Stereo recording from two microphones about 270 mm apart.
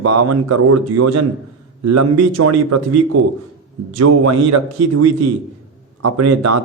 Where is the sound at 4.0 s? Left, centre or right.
Right.